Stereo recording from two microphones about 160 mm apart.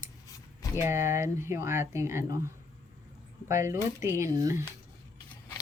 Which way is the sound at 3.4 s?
15° right (ahead or behind).